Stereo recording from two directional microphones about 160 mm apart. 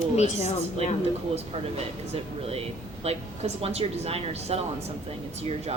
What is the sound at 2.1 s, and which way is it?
Speech, 40° right (ahead or behind).